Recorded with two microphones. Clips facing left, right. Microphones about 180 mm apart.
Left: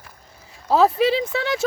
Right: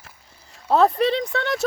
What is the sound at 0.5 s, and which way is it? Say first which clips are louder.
Speech: even; centre (ahead or behind).